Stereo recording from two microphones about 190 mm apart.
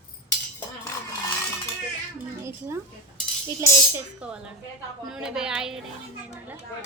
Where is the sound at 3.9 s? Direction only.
5° right (ahead or behind).